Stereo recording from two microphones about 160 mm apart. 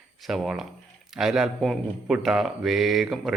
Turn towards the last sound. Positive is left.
turn(degrees=0)  # may be behind; listen again after turning